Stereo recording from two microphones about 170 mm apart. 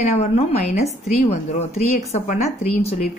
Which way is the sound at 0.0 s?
40° left (ahead or behind).